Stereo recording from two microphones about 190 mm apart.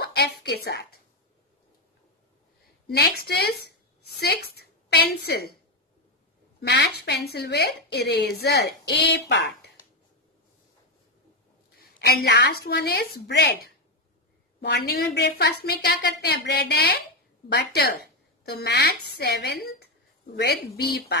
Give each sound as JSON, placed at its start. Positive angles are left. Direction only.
{"t": 0.0, "sound": "speech", "side_deg": 60}
{"t": 3.0, "sound": "a woman's voice", "side_deg": 55}
{"t": 6.7, "sound": "a woman's voice", "side_deg": 60}
{"t": 11.8, "sound": "a woman's voice", "side_deg": 55}